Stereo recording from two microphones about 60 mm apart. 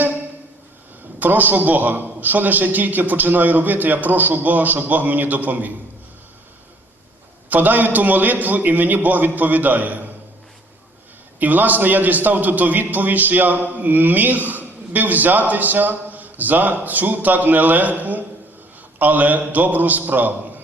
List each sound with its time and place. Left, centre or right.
1.2 s a man's voice: right
7.5 s a man's voice: right
11.3 s a man's voice: right